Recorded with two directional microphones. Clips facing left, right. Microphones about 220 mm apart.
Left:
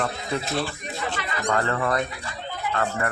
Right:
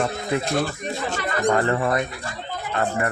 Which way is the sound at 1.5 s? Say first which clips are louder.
Right 3 dB; 20° right (ahead or behind).